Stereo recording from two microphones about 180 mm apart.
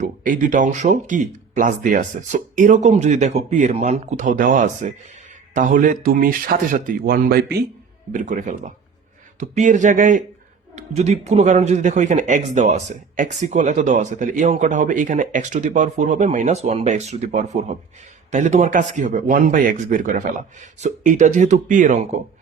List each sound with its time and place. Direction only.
0.0 s speech: 45° right (ahead or behind); by 7.6 s 60° right (ahead or behind)
8.1 s speech: 45° right (ahead or behind)